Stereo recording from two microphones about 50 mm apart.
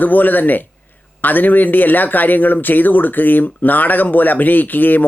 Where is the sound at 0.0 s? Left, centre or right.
Left.